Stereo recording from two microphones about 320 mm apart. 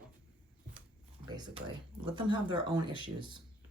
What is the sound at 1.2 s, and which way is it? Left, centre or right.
Speech, centre.